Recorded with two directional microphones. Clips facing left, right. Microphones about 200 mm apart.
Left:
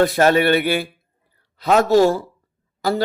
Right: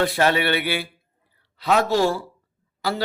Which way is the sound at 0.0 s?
45° left (ahead or behind).